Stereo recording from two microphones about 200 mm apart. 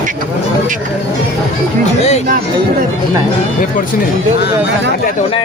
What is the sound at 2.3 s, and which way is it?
Speech, 45° right (ahead or behind).